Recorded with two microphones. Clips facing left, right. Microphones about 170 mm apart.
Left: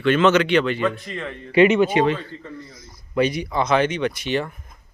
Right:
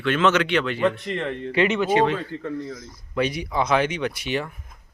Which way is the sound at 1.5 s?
10° left (ahead or behind).